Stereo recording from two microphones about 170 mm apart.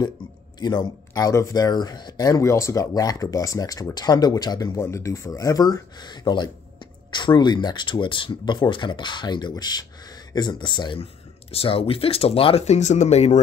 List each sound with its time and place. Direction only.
0.6 s speech: 25° left (ahead or behind); by 13.4 s 40° left (ahead or behind)